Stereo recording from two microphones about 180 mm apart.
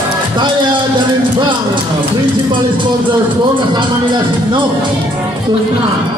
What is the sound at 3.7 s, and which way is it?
Speech, 25° right (ahead or behind).